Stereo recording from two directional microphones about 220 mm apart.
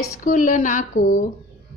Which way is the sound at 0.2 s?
35° left (ahead or behind).